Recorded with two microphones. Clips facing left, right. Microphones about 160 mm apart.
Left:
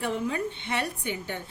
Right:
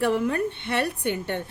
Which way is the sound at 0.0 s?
65° right (ahead or behind).